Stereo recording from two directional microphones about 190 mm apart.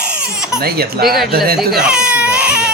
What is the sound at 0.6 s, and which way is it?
Speech, 55° right (ahead or behind).